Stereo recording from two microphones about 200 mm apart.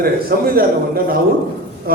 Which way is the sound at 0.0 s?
50° right (ahead or behind).